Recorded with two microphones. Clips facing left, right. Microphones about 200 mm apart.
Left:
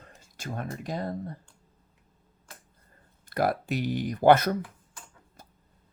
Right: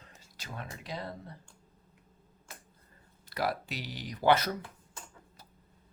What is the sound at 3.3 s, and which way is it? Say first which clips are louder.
Speech: left 7 dB; 50° left (ahead or behind).